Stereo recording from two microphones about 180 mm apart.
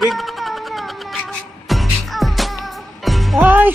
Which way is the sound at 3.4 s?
10° right (ahead or behind).